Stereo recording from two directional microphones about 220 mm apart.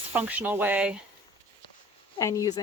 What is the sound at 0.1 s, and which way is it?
Speech, 5° right (ahead or behind).